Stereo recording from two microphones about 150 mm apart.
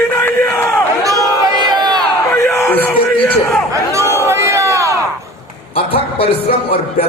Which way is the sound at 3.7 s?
20° right (ahead or behind).